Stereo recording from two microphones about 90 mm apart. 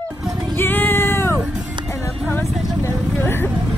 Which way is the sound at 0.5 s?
20° left (ahead or behind).